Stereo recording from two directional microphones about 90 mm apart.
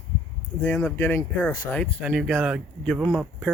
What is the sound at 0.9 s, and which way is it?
Speech, 25° left (ahead or behind).